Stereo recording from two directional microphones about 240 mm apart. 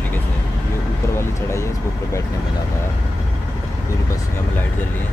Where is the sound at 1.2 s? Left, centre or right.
Centre.